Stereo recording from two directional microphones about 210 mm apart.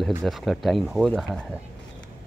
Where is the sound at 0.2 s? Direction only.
Centre (ahead or behind).